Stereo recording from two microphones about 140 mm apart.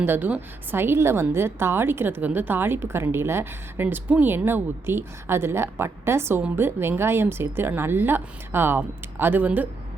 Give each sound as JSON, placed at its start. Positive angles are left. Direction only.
{"t": 0.0, "sound": "a woman's voice", "side_deg": -15}